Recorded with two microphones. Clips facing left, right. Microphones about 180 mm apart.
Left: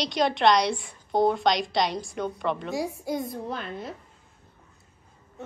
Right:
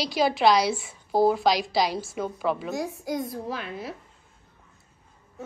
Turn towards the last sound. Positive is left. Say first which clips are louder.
# even
turn(degrees=-5)  # may be behind; listen again after turning